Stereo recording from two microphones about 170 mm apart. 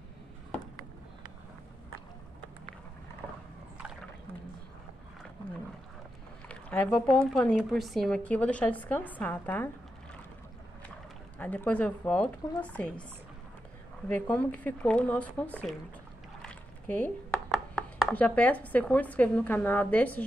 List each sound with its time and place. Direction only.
6.5 s a woman's voice: 10° left (ahead or behind)
11.3 s a woman's voice: 10° left (ahead or behind)
14.0 s a woman's voice: 10° left (ahead or behind)
16.4 s a sound: 10° left (ahead or behind)
17.5 s speech: 5° left (ahead or behind)